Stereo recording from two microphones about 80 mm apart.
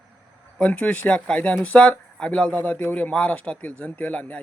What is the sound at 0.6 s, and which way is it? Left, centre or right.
Speech, centre.